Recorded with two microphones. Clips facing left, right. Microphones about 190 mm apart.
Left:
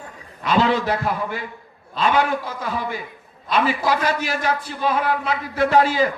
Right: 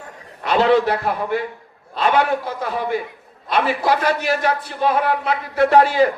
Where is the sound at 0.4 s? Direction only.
60° right (ahead or behind).